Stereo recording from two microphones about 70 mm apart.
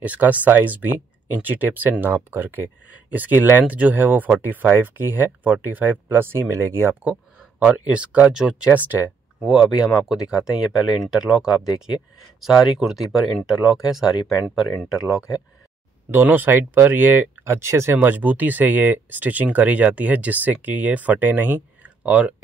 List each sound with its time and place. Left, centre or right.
0.0 s speech: right
7.6 s speech: centre
8.7 s speech: right
9.4 s speech: centre
16.1 s speech: right